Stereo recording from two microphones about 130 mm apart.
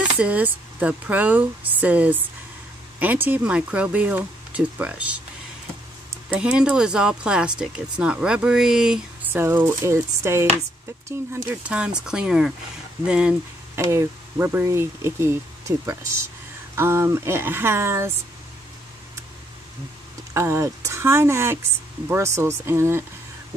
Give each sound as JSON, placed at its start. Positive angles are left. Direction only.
{"t": 0.0, "sound": "speech", "side_deg": -10}
{"t": 6.3, "sound": "speech", "side_deg": -10}
{"t": 9.3, "sound": "speech", "side_deg": -15}
{"t": 11.6, "sound": "speech", "side_deg": -10}
{"t": 13.7, "sound": "speech", "side_deg": -25}
{"t": 20.3, "sound": "speech", "side_deg": -20}